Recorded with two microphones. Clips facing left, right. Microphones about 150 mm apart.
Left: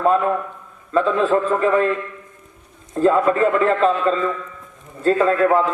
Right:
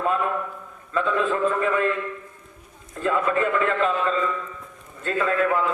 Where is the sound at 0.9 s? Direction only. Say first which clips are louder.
Left 6 dB; 35° left (ahead or behind).